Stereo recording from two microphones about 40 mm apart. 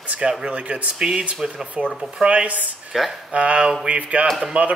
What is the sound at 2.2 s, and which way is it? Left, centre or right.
Speech, right.